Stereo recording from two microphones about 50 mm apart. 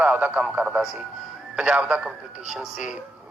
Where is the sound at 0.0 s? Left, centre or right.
Right.